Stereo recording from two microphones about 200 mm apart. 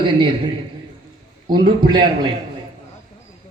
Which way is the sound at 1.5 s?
20° right (ahead or behind).